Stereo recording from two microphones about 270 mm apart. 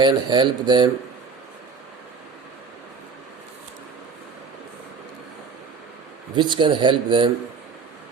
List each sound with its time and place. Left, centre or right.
0.0 s speech: centre
6.3 s speech: centre